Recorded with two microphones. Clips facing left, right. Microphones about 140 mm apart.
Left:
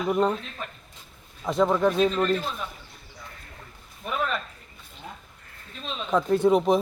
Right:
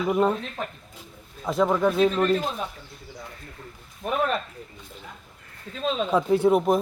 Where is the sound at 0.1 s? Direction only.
5° right (ahead or behind).